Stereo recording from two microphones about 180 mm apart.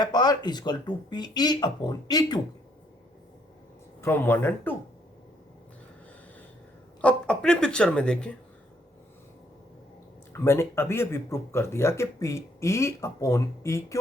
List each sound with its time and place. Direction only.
0.0 s speech: 20° left (ahead or behind)
4.0 s speech: 10° left (ahead or behind)
7.0 s speech: 5° left (ahead or behind)
10.3 s speech: 15° left (ahead or behind)